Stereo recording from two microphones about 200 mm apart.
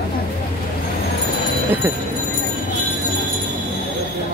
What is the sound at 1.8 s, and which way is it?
Speech, 10° right (ahead or behind).